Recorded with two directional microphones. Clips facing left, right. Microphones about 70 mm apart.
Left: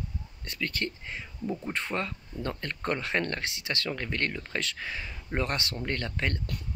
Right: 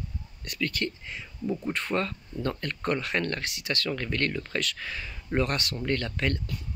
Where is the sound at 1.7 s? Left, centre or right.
Centre.